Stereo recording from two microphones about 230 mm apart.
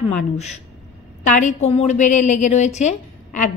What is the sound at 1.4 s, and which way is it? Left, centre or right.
A woman's voice, left.